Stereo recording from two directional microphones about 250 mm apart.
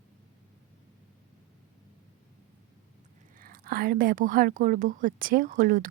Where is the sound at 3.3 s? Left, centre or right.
Right.